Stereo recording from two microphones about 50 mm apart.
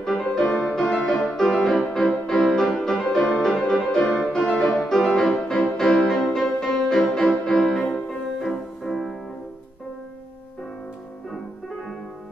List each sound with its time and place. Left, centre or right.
0.0 s music: centre
4.3 s music: left